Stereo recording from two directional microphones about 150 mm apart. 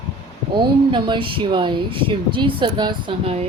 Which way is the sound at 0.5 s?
30° right (ahead or behind).